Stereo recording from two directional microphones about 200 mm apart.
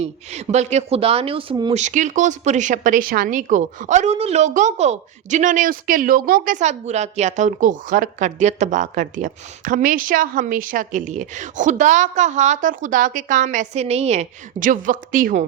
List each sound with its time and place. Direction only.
0.0 s speech: 35° right (ahead or behind)
1.7 s speech: 35° right (ahead or behind)